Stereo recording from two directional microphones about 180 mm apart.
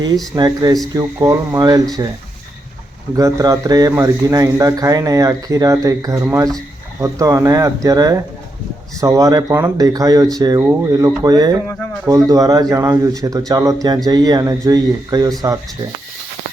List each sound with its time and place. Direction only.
0.3 s speech: 20° right (ahead or behind)
3.2 s speech: 20° right (ahead or behind)